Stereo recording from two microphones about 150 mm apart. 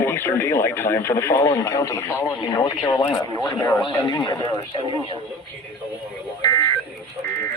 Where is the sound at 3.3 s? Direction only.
10° left (ahead or behind).